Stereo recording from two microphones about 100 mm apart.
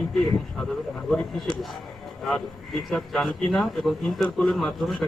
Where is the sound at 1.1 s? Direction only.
5° left (ahead or behind).